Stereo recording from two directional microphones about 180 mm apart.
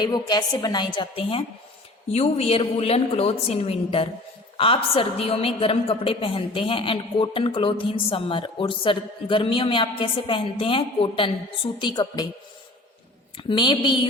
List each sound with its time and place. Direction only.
0.0 s a woman's voice: 25° left (ahead or behind)
13.3 s a woman's voice: 25° left (ahead or behind)